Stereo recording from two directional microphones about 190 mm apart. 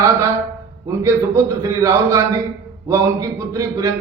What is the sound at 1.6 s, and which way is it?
Speech, 15° right (ahead or behind).